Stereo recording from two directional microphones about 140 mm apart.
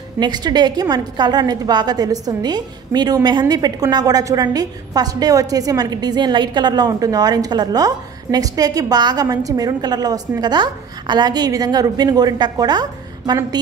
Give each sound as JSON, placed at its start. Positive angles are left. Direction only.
{"t": 0.2, "sound": "a woman's voice", "side_deg": -30}